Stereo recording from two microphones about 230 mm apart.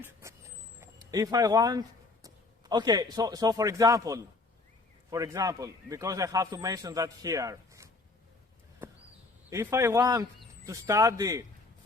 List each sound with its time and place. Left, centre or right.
0.0 s vehicle: centre
0.8 s a man's voice: centre
9.5 s a man's voice: centre